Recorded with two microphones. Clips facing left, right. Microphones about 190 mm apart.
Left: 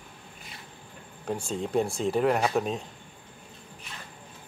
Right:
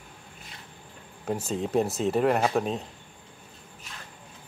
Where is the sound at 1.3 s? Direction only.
5° right (ahead or behind).